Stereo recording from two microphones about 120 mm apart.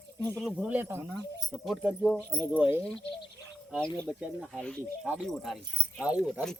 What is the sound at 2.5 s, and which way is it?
Speech, 10° right (ahead or behind).